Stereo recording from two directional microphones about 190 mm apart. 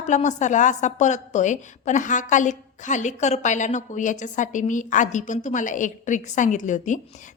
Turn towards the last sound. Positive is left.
turn(degrees=40)  # may be behind; listen again after turning